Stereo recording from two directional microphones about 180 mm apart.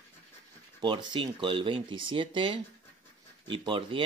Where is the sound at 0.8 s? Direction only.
25° right (ahead or behind).